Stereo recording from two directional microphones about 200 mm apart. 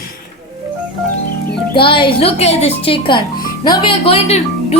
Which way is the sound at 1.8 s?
25° left (ahead or behind).